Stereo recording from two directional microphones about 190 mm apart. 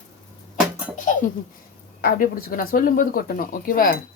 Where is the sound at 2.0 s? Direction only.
50° left (ahead or behind).